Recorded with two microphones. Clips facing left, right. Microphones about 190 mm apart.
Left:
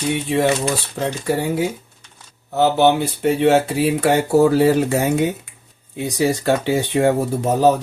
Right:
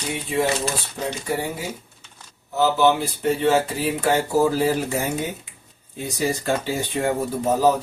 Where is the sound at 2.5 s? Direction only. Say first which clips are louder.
Left 3 dB; 65° left (ahead or behind).